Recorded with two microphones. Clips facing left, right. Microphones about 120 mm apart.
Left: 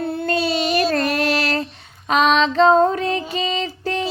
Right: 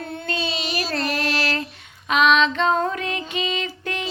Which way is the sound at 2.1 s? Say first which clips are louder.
Left 1 dB; 40° left (ahead or behind).